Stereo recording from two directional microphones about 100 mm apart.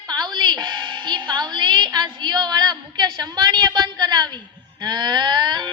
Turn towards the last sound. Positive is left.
turn(degrees=-45)  # may be behind; listen again after turning